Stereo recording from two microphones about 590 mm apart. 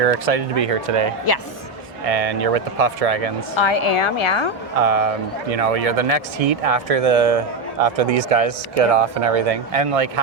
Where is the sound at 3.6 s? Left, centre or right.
Left.